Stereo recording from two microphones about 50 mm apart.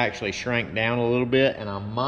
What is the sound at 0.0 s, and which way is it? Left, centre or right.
Speech, centre.